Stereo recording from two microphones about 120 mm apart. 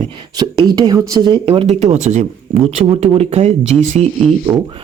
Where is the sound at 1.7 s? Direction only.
70° right (ahead or behind).